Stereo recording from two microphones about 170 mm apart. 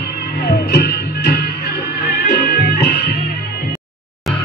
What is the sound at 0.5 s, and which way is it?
Music, 75° left (ahead or behind).